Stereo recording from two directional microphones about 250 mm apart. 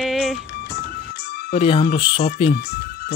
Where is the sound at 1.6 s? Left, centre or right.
Left.